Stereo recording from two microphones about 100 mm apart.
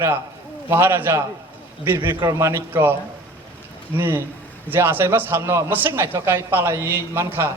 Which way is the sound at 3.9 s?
25° right (ahead or behind).